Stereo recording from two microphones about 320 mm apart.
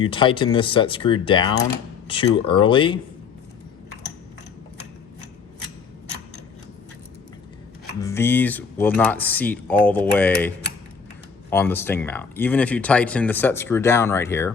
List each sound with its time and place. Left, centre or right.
0.0 s speech: centre
8.0 s speech: centre